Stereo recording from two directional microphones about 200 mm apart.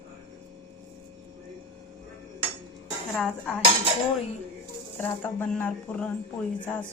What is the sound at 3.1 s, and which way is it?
Speech, 5° left (ahead or behind).